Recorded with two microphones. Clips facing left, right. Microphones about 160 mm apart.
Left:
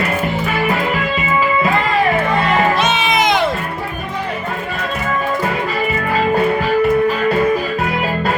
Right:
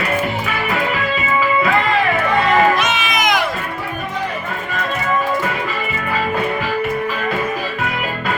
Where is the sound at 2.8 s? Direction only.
30° left (ahead or behind).